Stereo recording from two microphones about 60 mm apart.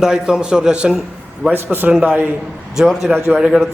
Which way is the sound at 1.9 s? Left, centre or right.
Centre.